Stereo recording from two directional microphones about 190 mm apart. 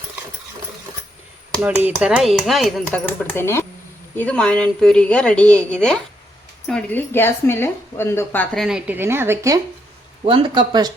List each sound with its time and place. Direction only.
1.6 s a woman's voice: 5° right (ahead or behind); by 8.6 s 10° left (ahead or behind)
8.6 s speech: 5° right (ahead or behind)
10.2 s speech: 25° right (ahead or behind)